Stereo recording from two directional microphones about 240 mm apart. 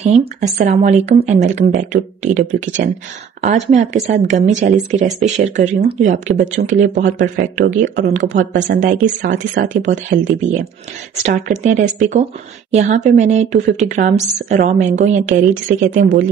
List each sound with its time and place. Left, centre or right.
0.0 s speech: right
9.3 s speech: right
9.8 s speech: right
11.2 s speech: right